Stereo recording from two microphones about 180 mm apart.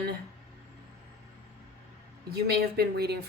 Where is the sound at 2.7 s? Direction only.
65° right (ahead or behind).